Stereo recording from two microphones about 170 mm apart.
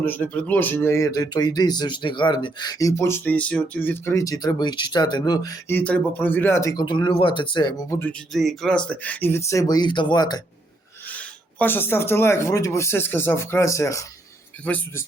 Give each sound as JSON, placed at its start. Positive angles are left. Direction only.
{"t": 0.0, "sound": "speech", "side_deg": 10}
{"t": 5.7, "sound": "speech", "side_deg": 10}
{"t": 8.3, "sound": "speech", "side_deg": 0}
{"t": 11.1, "sound": "speech", "side_deg": 10}